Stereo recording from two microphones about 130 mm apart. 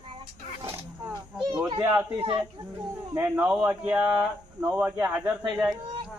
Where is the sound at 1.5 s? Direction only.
35° right (ahead or behind).